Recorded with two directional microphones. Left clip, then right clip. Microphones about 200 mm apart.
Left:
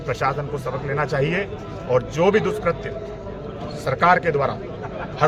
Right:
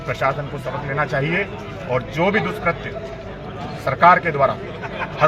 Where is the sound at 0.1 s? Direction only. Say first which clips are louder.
Right 1 dB; 25° left (ahead or behind).